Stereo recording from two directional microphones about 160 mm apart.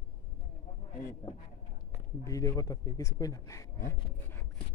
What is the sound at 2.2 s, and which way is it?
A man's voice, 20° left (ahead or behind).